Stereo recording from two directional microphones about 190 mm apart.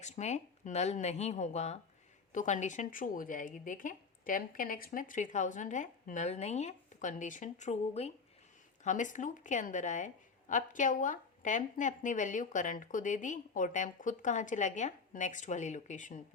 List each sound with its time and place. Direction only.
0.0 s speech: 35° left (ahead or behind)